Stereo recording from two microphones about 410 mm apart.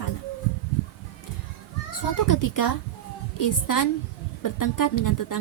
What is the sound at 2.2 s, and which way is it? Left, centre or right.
Speech, left.